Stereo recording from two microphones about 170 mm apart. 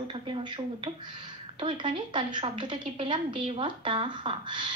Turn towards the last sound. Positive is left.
turn(degrees=-25)  # may be behind; listen again after turning